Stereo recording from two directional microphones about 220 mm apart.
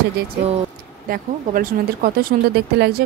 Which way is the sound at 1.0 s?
40° right (ahead or behind).